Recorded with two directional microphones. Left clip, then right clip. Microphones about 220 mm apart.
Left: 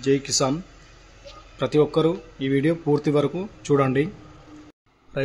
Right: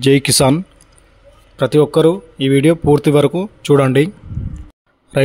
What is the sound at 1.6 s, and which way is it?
Speech, 30° right (ahead or behind).